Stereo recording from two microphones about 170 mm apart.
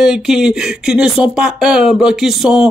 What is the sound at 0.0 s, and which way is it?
Speech, centre (ahead or behind).